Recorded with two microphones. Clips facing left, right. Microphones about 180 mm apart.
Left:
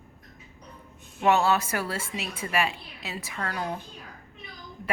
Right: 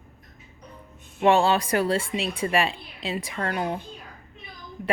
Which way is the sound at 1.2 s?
30° right (ahead or behind).